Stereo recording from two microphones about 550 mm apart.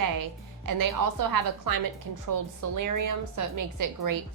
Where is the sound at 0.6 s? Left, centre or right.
Right.